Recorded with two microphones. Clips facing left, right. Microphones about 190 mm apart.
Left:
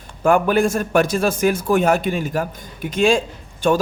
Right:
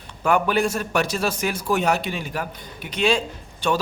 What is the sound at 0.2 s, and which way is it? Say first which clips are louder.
A man's voice: left 4 dB; 50° left (ahead or behind).